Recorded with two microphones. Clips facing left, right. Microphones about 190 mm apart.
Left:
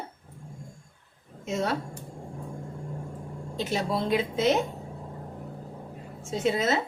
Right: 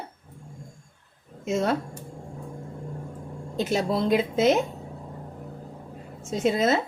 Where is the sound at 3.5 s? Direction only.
50° right (ahead or behind).